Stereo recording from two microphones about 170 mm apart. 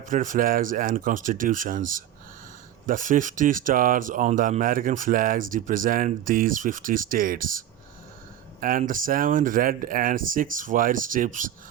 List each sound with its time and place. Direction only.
0.0 s speech: 50° right (ahead or behind)
8.8 s speech: 55° right (ahead or behind)